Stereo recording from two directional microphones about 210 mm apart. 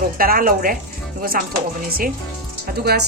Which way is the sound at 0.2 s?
45° right (ahead or behind).